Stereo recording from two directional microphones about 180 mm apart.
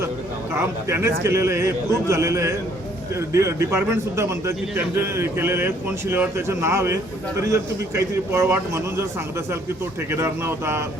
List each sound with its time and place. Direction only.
0.5 s speech: 15° right (ahead or behind)
10.1 s speech: 15° right (ahead or behind)